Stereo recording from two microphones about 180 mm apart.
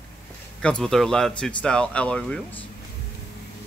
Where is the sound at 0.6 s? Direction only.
5° left (ahead or behind).